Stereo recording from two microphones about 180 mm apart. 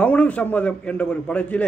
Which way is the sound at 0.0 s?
10° left (ahead or behind).